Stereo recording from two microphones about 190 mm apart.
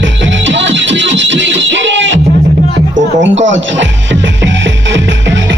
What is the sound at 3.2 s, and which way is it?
Music, 75° right (ahead or behind).